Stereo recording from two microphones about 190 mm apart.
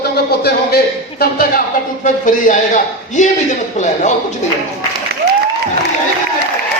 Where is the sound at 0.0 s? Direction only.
55° left (ahead or behind); by 3.9 s 40° left (ahead or behind).